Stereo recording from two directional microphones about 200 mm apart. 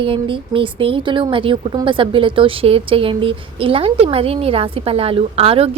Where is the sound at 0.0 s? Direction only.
25° right (ahead or behind).